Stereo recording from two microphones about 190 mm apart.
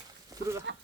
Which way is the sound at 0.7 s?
70° right (ahead or behind).